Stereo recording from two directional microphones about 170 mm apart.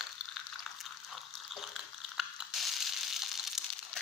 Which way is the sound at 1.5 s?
Centre (ahead or behind).